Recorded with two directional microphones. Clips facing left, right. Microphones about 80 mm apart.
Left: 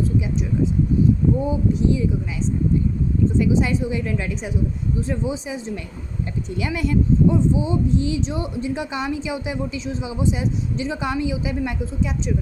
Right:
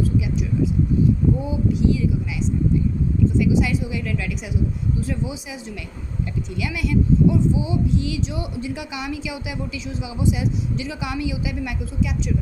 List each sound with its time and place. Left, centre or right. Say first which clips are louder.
1.5 s speech: left 1 dB; left
3.3 s speech: left 1 dB; left